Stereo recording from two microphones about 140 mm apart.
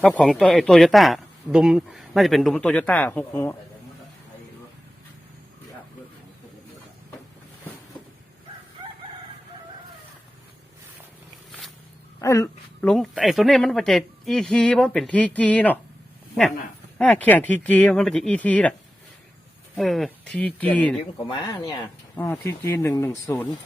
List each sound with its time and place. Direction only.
0.0 s speech: 10° left (ahead or behind)
8.8 s chicken: 30° right (ahead or behind)
12.2 s speech: 20° left (ahead or behind)
12.8 s speech: 5° left (ahead or behind)
17.0 s speech: 10° left (ahead or behind)
19.7 s speech: centre (ahead or behind)
21.2 s speech: 30° left (ahead or behind)
22.1 s speech: 20° left (ahead or behind)